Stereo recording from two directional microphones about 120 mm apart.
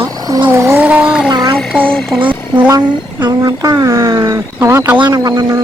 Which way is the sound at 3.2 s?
35° right (ahead or behind).